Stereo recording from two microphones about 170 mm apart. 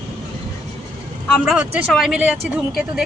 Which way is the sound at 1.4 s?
5° right (ahead or behind).